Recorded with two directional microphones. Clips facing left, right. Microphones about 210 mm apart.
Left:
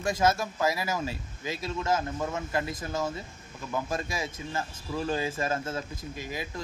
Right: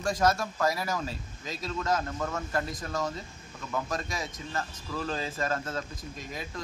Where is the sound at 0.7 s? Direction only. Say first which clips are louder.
Left 1 dB; 5° left (ahead or behind).